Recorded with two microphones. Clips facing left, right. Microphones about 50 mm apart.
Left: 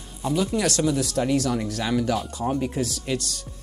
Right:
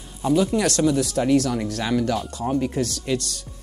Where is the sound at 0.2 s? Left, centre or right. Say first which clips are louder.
Right 4 dB; centre.